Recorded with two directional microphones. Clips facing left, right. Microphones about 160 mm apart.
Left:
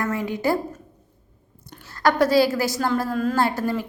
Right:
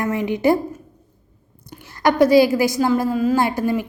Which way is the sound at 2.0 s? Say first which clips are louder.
Right 4 dB; 15° right (ahead or behind).